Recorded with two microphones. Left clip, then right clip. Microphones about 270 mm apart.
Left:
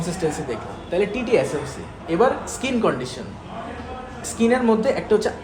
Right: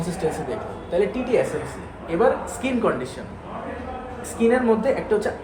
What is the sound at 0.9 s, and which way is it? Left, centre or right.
A man's voice, left.